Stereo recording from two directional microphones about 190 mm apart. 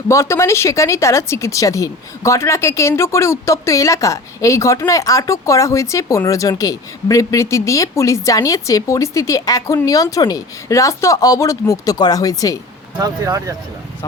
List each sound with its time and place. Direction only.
0.1 s speech: 15° left (ahead or behind)
13.0 s speech: 15° right (ahead or behind)